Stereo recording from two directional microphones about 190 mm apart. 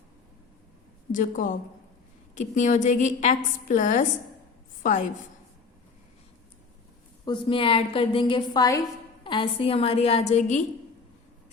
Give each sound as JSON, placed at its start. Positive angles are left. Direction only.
{"t": 1.1, "sound": "a woman's voice", "side_deg": 45}
{"t": 7.3, "sound": "a woman's voice", "side_deg": 25}